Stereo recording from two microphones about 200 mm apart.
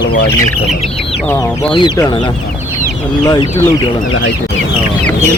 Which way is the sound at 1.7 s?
20° left (ahead or behind).